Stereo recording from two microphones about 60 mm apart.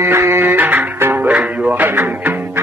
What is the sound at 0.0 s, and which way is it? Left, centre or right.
Music, right.